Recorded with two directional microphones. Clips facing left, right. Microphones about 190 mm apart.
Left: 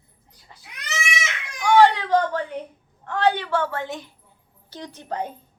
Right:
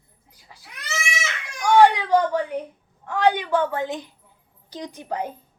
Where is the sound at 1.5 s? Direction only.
15° right (ahead or behind).